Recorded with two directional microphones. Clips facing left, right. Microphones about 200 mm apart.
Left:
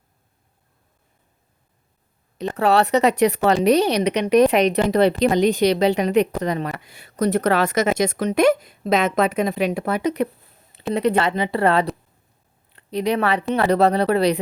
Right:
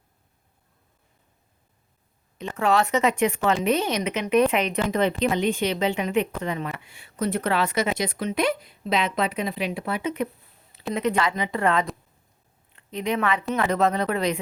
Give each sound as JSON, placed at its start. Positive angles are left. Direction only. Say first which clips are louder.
{"t": 2.4, "sound": "speech", "louder": "left 4 dB", "side_deg": 35}